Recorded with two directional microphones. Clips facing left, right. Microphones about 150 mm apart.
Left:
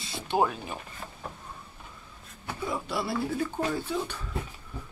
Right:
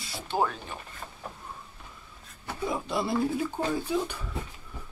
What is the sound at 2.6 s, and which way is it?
Speech, 20° right (ahead or behind).